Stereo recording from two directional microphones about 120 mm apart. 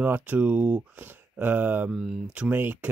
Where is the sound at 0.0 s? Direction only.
15° right (ahead or behind).